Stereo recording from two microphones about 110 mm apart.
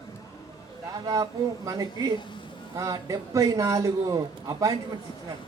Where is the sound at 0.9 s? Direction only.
35° right (ahead or behind).